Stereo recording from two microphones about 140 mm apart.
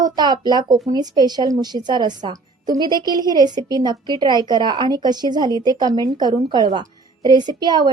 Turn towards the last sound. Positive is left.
turn(degrees=-30)  # may be behind; listen again after turning